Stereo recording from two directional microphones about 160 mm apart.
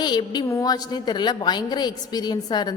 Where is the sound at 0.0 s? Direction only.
25° left (ahead or behind).